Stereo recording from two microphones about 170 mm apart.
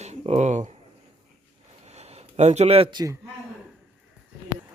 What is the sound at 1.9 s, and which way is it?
Speech, 40° right (ahead or behind).